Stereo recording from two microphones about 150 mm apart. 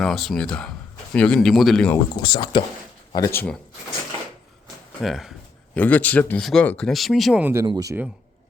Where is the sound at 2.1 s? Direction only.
30° left (ahead or behind).